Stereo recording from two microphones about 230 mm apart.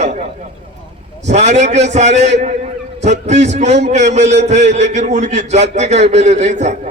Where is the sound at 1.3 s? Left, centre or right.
Right.